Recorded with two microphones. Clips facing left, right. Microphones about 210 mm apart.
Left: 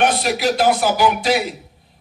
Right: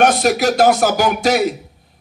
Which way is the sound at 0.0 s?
45° right (ahead or behind).